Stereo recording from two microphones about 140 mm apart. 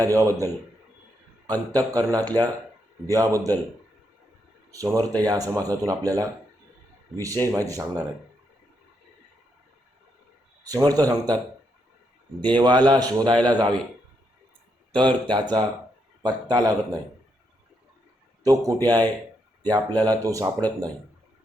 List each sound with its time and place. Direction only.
0.0 s speech: 20° right (ahead or behind)
4.7 s speech: 25° right (ahead or behind)
10.6 s speech: 25° right (ahead or behind)
12.5 s a man's voice: 30° right (ahead or behind)
14.9 s a man's voice: 35° right (ahead or behind)
18.4 s speech: 25° right (ahead or behind)